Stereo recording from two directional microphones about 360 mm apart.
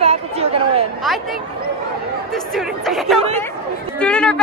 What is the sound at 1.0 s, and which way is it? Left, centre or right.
A man's voice, centre.